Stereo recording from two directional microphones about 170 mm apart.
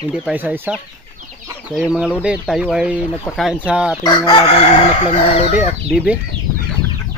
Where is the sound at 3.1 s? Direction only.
10° left (ahead or behind).